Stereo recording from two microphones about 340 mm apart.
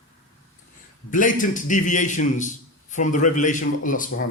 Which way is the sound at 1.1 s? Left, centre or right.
Left.